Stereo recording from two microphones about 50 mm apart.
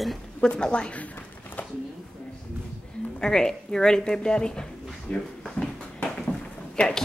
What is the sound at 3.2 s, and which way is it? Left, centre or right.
A woman's voice, centre.